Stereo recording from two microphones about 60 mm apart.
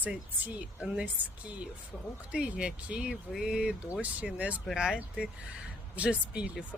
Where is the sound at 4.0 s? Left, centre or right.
Right.